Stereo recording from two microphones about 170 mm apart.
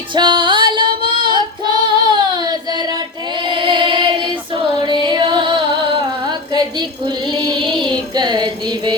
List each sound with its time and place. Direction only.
0.1 s music: 30° right (ahead or behind)
1.0 s child singing: 30° right (ahead or behind)